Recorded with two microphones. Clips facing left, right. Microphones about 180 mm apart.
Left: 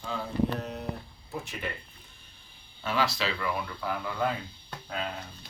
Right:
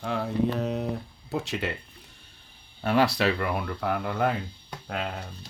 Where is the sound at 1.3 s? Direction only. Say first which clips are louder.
Right 7 dB; 80° right.